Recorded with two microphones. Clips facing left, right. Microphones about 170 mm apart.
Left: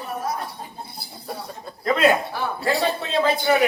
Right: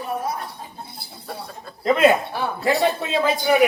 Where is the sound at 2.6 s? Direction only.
15° right (ahead or behind).